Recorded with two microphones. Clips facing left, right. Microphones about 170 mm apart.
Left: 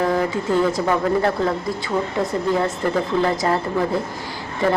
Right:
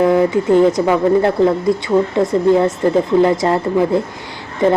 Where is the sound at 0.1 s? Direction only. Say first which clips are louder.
Right 7 dB; 20° right (ahead or behind).